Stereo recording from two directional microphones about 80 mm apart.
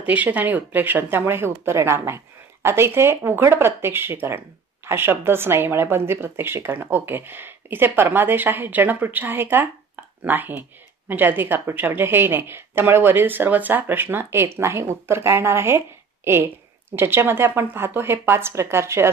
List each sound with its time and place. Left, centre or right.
0.0 s a woman's voice: centre
16.9 s speech: right